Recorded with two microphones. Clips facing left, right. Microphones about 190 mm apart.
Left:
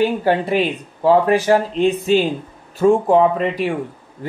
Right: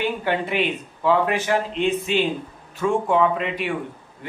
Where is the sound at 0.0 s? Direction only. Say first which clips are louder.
Left 7 dB; 35° left (ahead or behind).